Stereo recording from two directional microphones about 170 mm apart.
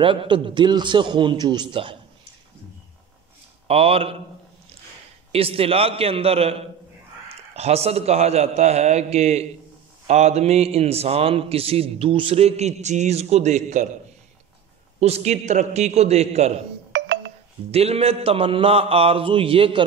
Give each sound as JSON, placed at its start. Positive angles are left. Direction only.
{"t": 0.0, "sound": "a man's voice", "side_deg": -30}
{"t": 3.6, "sound": "a man's voice", "side_deg": -35}
{"t": 5.3, "sound": "a man's voice", "side_deg": -35}
{"t": 15.0, "sound": "a man's voice", "side_deg": -40}
{"t": 16.9, "sound": "a sound", "side_deg": -90}
{"t": 17.6, "sound": "a man's voice", "side_deg": -35}